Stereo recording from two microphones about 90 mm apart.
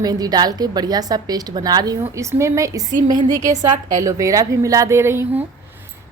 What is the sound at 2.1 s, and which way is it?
A woman's voice, 35° right (ahead or behind).